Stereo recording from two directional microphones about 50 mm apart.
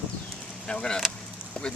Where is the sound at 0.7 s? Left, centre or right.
Centre.